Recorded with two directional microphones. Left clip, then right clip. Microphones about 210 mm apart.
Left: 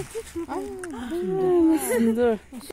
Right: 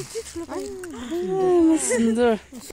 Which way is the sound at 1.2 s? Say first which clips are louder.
Right 2 dB; 5° right (ahead or behind).